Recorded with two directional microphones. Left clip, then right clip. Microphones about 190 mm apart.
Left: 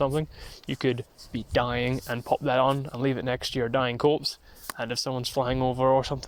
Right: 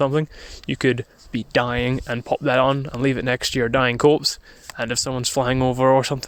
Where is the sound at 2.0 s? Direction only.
40° right (ahead or behind).